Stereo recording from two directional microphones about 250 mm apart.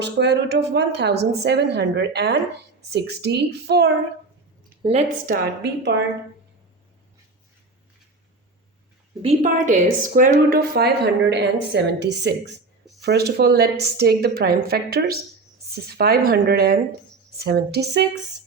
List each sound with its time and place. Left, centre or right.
0.0 s a woman's voice: right
4.8 s a woman's voice: right
9.2 s a woman's voice: right